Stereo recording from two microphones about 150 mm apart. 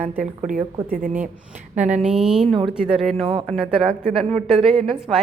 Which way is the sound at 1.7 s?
10° right (ahead or behind).